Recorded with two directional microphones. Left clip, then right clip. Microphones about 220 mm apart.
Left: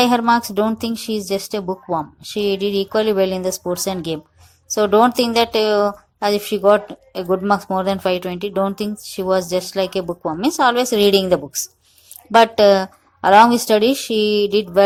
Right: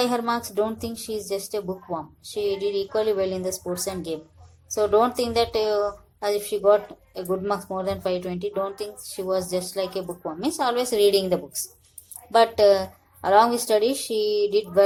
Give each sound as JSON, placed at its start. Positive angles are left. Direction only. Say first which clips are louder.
{"t": 0.0, "sound": "a woman's voice", "louder": "left 9 dB", "side_deg": 25}